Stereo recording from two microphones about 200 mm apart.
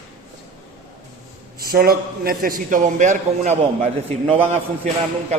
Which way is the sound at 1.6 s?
50° right (ahead or behind).